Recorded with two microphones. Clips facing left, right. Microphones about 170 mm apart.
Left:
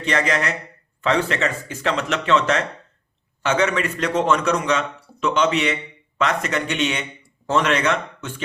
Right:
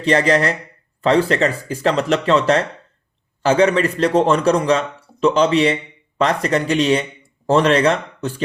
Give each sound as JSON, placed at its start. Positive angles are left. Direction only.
{"t": 0.0, "sound": "a man's voice", "side_deg": -35}